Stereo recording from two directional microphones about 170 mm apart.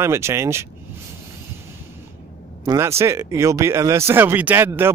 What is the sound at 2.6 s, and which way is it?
Speech, 15° right (ahead or behind).